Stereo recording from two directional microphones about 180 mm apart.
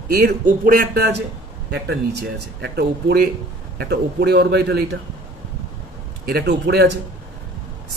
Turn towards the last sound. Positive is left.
turn(degrees=-65)  # may be behind; listen again after turning